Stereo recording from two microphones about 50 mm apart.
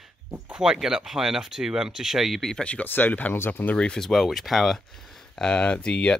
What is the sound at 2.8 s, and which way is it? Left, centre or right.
Speech, left.